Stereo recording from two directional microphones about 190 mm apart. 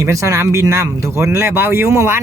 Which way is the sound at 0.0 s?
15° right (ahead or behind).